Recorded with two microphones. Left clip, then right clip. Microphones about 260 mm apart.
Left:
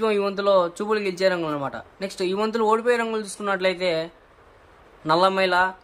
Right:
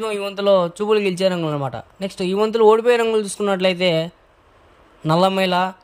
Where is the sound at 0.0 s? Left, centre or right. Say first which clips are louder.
Right 1 dB; right.